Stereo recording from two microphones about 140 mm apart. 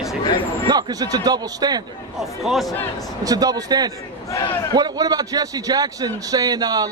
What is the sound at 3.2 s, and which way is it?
A man's voice, 25° right (ahead or behind).